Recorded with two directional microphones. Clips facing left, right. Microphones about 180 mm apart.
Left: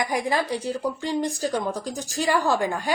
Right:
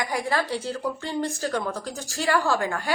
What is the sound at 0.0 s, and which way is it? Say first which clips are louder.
A woman's voice: left 2 dB; 20° left (ahead or behind).